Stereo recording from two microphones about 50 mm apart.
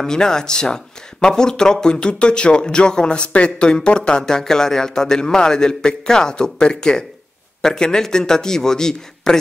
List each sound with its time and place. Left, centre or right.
0.0 s speech: centre